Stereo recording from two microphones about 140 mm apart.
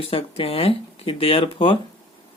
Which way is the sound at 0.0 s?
45° left (ahead or behind).